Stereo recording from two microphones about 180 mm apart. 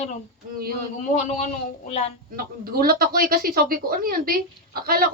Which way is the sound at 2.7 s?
55° right (ahead or behind).